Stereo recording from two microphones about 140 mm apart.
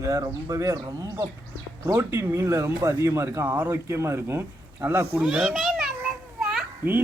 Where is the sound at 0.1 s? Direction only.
25° right (ahead or behind).